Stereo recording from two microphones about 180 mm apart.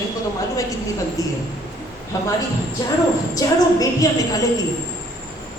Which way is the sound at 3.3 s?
20° left (ahead or behind).